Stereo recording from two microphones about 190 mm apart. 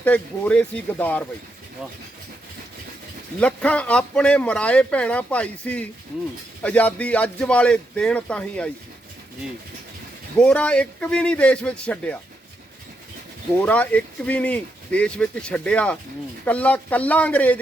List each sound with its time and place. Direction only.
0.0 s speech: 5° left (ahead or behind)
3.4 s a man's voice: 5° left (ahead or behind)
10.3 s a man's voice: 5° left (ahead or behind)
13.5 s speech: 10° left (ahead or behind)